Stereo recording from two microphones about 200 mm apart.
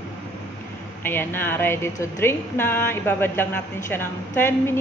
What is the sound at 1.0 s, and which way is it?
Speech, 10° left (ahead or behind).